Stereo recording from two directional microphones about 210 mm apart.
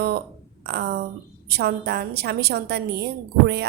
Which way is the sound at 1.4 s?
50° right (ahead or behind).